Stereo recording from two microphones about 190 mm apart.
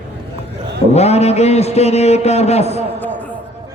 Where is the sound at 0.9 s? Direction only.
35° left (ahead or behind).